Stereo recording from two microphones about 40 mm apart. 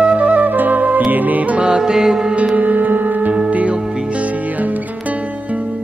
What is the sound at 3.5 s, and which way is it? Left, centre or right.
Music, right.